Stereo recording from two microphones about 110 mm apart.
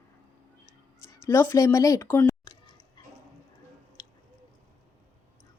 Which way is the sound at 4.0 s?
40° left (ahead or behind).